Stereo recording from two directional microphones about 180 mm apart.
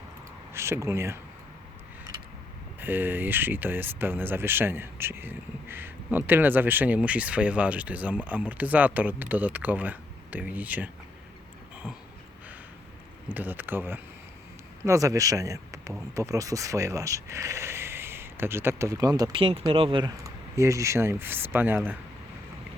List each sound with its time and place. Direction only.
0.5 s speech: 15° right (ahead or behind)
2.8 s speech: 10° right (ahead or behind)
13.2 s speech: 10° right (ahead or behind)